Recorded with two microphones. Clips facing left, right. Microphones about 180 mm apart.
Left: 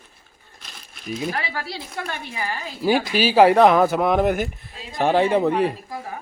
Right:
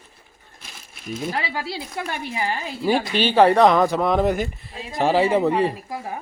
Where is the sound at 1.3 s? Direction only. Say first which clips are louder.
Right 1 dB; 25° right (ahead or behind).